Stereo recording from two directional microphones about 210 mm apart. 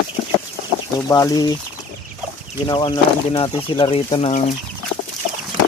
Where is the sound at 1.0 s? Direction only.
15° left (ahead or behind).